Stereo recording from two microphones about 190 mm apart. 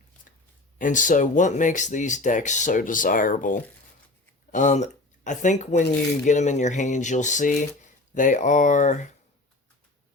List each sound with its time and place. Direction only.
0.8 s speech: 40° left (ahead or behind)